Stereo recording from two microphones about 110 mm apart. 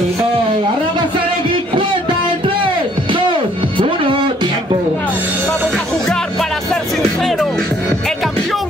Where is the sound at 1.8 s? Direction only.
50° right (ahead or behind).